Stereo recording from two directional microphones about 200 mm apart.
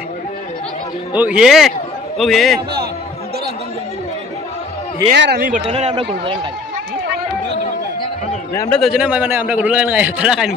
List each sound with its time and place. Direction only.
1.1 s a man's voice: 5° right (ahead or behind)
5.1 s speech: 55° right (ahead or behind)
5.7 s speech: 30° right (ahead or behind)
8.5 s a man's voice: 5° left (ahead or behind)